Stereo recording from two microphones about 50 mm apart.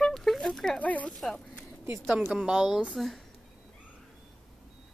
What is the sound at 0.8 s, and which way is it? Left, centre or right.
Speech, left.